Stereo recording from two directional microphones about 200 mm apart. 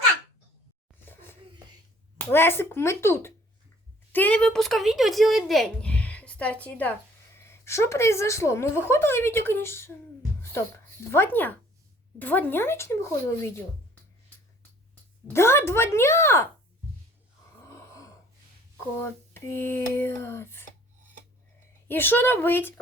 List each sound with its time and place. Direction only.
2.1 s a woman's voice: 10° left (ahead or behind)
11.1 s a woman's voice: 10° left (ahead or behind)
15.3 s a woman's voice: 15° left (ahead or behind)
17.7 s gasp: 15° left (ahead or behind)
19.3 s a woman's voice: 10° left (ahead or behind)
21.8 s a woman's voice: 10° left (ahead or behind)